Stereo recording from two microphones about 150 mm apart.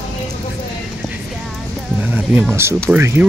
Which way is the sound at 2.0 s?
10° right (ahead or behind).